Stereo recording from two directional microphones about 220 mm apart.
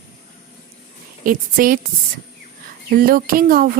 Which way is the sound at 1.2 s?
40° right (ahead or behind).